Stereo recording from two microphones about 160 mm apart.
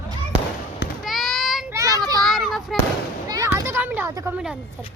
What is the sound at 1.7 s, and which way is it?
Children playing, 20° right (ahead or behind).